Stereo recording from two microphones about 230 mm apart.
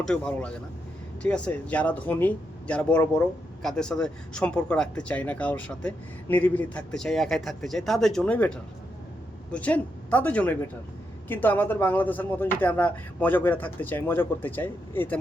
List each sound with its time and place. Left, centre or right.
0.0 s speech: centre